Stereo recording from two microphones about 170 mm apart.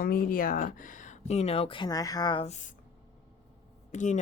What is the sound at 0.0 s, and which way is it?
Speech, 60° left (ahead or behind).